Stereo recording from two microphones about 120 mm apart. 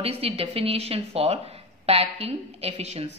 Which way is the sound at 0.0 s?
55° right (ahead or behind).